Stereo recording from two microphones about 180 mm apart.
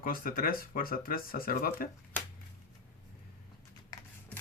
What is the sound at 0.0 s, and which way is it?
Speech, 50° left (ahead or behind).